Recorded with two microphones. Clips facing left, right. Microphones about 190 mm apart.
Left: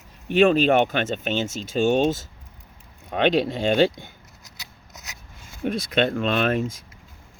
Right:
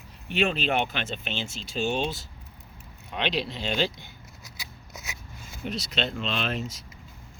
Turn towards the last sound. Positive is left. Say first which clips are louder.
# left 8 dB
turn(degrees=50)  # may be behind; listen again after turning